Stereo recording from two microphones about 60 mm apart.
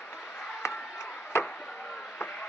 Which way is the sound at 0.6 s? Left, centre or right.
Left.